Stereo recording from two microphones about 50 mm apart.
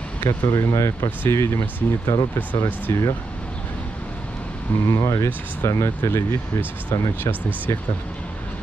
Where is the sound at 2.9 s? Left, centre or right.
Left.